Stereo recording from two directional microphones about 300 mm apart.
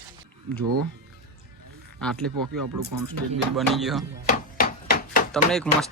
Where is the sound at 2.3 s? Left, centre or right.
Right.